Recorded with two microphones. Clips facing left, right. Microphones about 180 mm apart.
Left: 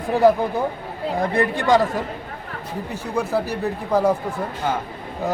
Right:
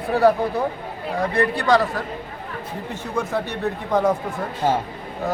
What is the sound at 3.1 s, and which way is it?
Speech, 10° left (ahead or behind).